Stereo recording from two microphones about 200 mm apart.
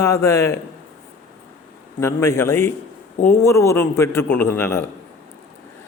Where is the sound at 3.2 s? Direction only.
45° left (ahead or behind).